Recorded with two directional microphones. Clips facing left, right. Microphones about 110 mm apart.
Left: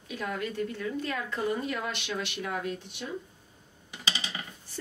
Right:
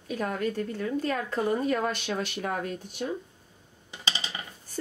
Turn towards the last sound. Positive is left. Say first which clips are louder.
# right 5 dB
turn(degrees=-45)  # may be behind; listen again after turning